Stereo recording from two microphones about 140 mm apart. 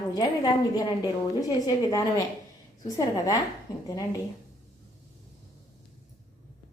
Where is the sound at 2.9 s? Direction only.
25° left (ahead or behind).